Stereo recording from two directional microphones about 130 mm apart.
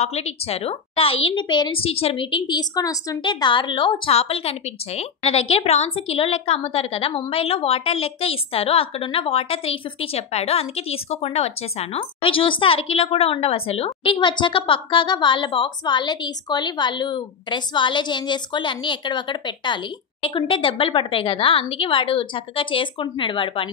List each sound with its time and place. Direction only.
0.0 s a woman's voice: 55° left (ahead or behind)
12.0 s a woman's voice: 40° left (ahead or behind)